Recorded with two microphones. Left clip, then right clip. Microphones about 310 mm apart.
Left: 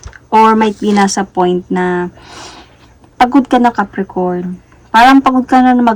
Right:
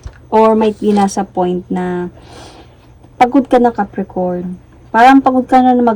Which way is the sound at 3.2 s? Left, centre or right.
Left.